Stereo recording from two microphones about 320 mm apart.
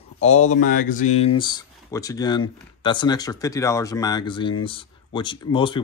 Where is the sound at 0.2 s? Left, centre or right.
Left.